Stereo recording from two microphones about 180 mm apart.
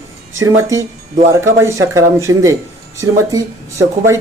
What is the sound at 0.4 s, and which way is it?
Speech, 15° right (ahead or behind).